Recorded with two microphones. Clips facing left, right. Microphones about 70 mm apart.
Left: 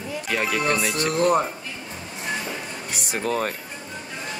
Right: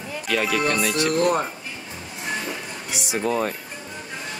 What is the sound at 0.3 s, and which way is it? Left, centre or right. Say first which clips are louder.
Speech: right 2 dB; left.